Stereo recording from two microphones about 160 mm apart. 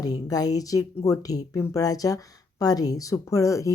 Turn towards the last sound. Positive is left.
turn(degrees=20)  # may be behind; listen again after turning